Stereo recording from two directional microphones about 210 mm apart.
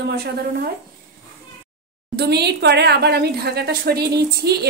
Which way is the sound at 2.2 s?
50° right (ahead or behind).